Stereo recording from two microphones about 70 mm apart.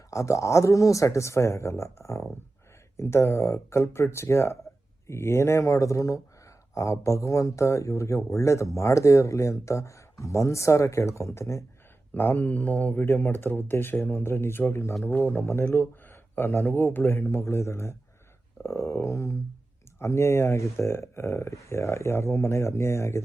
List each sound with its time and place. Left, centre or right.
0.1 s speech: left
12.1 s speech: left
15.6 s speech: left
16.5 s speech: left